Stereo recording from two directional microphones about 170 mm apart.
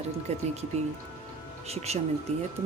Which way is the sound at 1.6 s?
40° right (ahead or behind).